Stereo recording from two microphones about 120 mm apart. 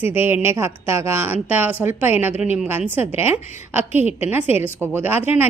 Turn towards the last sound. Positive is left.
turn(degrees=-15)  # may be behind; listen again after turning